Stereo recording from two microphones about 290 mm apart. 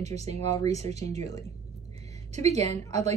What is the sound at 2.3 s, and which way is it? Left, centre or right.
Speech, right.